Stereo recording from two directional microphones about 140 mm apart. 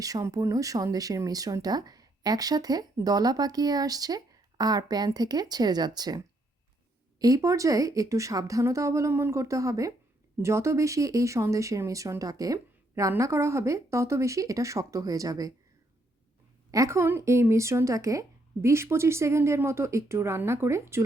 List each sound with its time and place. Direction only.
0.0 s speech: 25° right (ahead or behind)
16.7 s speech: 20° right (ahead or behind)